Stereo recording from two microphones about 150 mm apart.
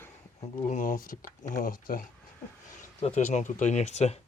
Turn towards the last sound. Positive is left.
turn(degrees=50)  # may be behind; listen again after turning